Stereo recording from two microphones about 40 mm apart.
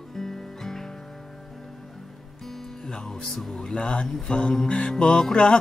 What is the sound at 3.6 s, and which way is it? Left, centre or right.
Music, left.